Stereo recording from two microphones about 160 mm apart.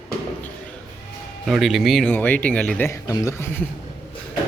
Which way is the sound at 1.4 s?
Centre (ahead or behind).